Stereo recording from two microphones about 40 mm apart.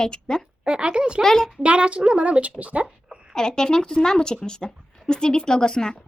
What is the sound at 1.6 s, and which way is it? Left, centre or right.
Speech, right.